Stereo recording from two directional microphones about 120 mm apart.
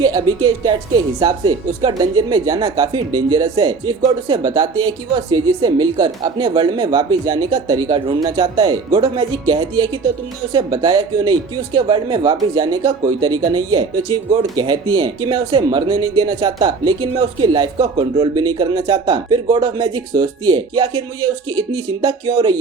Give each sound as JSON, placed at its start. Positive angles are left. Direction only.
{"t": 0.0, "sound": "speech", "side_deg": -35}